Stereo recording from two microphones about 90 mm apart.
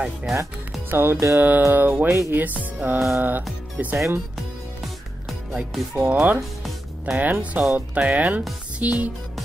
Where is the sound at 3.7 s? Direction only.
20° right (ahead or behind).